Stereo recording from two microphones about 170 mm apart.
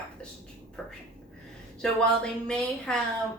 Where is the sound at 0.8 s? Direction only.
Centre (ahead or behind).